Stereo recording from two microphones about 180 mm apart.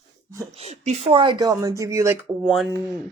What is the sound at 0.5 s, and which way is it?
A woman's voice, 35° right (ahead or behind).